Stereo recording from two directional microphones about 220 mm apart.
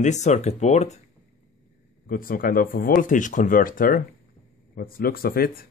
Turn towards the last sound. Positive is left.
turn(degrees=45)  # may be behind; listen again after turning